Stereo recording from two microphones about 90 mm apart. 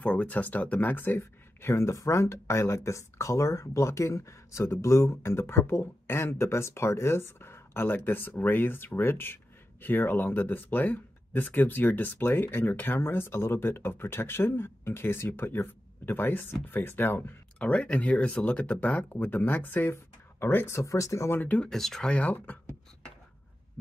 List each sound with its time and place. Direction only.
0.0 s speech: 15° left (ahead or behind); by 21.4 s 35° left (ahead or behind)
21.4 s speech: 15° left (ahead or behind)
21.6 s speech: 5° left (ahead or behind)
22.1 s speech: 15° left (ahead or behind)